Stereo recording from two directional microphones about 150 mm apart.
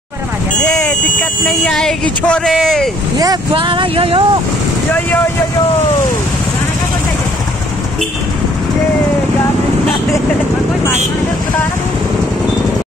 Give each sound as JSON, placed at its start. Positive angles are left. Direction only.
{"t": 0.7, "sound": "vehicle", "side_deg": 5}
{"t": 1.6, "sound": "speech", "side_deg": 5}
{"t": 3.2, "sound": "speech", "side_deg": -30}